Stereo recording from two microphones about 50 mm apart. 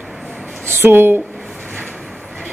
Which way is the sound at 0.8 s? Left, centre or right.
Right.